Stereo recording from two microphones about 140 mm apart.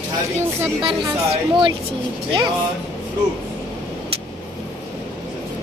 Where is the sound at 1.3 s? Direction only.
35° right (ahead or behind).